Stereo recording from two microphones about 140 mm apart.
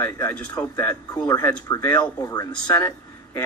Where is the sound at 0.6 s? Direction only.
25° left (ahead or behind).